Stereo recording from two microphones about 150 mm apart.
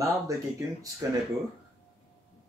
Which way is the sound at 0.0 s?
20° right (ahead or behind).